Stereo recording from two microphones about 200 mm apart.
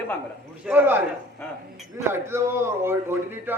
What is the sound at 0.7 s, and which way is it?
Speech, 10° right (ahead or behind).